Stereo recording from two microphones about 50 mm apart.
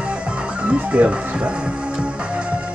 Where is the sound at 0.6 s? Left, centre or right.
Right.